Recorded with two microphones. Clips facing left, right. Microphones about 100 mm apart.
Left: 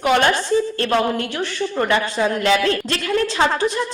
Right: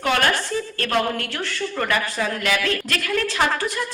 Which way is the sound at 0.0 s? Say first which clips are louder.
Left 4 dB; 25° left (ahead or behind).